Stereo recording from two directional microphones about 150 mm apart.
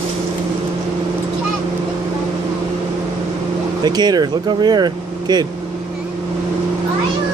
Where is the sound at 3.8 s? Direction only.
25° right (ahead or behind).